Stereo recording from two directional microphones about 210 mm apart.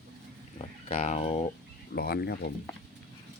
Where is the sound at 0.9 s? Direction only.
30° left (ahead or behind).